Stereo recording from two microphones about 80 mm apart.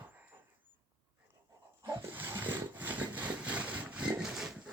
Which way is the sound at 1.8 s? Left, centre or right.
Right.